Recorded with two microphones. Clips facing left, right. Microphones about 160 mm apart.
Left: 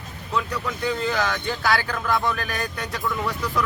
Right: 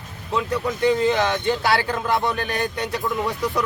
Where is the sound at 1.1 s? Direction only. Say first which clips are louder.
Right 5 dB; 25° right (ahead or behind).